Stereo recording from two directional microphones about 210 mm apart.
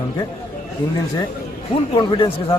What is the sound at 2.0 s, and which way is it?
Speech, 25° left (ahead or behind).